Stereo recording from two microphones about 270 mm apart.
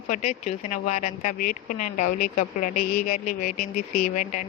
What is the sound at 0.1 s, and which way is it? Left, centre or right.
Speech, left.